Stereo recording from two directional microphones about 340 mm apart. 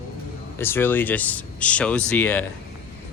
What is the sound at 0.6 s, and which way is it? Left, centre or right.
Speech, centre.